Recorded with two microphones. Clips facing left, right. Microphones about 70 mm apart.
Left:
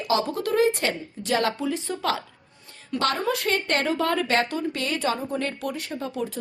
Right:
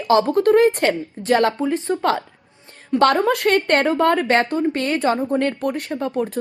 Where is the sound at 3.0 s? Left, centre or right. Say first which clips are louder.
Right 9 dB; right.